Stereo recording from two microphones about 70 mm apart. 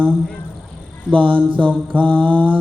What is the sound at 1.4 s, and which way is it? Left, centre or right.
Mantra, centre.